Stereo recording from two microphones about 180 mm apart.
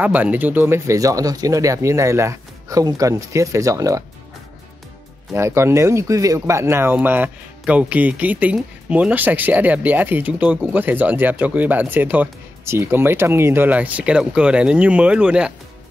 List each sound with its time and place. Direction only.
0.0 s speech: 10° right (ahead or behind)
5.3 s speech: 15° right (ahead or behind)